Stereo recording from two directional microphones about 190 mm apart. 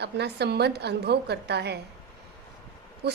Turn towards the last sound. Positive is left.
turn(degrees=-60)  # may be behind; listen again after turning